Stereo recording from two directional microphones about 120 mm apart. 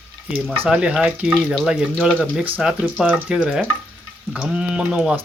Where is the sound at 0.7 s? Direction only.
10° right (ahead or behind).